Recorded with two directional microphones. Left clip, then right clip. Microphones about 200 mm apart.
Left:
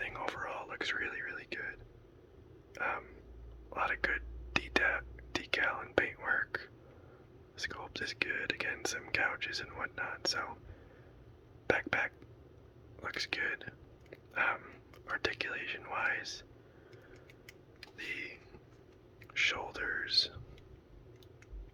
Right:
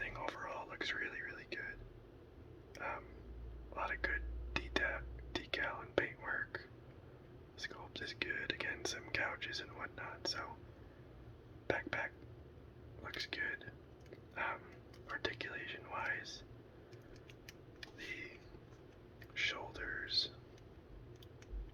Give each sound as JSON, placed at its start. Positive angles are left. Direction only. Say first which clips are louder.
{"t": 0.0, "sound": "whispering", "louder": "left 5 dB", "side_deg": 25}
{"t": 2.7, "sound": "a sound", "louder": "left 8 dB", "side_deg": 30}
{"t": 3.8, "sound": "whispering", "louder": "left 6 dB", "side_deg": 30}
{"t": 11.7, "sound": "whispering", "louder": "left 7 dB", "side_deg": 35}
{"t": 17.9, "sound": "a sound", "louder": "left 7 dB", "side_deg": 30}
{"t": 19.3, "sound": "whispering", "louder": "left 7 dB", "side_deg": 30}